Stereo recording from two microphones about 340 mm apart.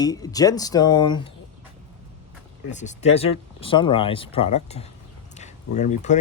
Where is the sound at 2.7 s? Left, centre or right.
Left.